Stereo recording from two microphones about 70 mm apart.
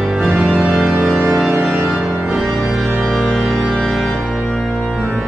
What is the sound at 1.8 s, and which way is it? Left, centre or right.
Music, centre.